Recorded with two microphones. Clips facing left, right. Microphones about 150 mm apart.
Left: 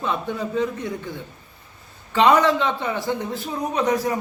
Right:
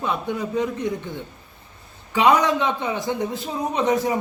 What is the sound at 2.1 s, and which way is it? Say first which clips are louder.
A man's voice: left 1 dB; 10° right (ahead or behind).